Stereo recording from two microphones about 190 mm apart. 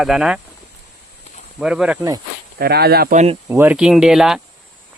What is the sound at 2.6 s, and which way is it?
Speech, 55° right (ahead or behind).